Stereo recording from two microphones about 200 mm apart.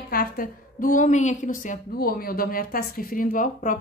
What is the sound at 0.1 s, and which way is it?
A woman's voice, 45° left (ahead or behind).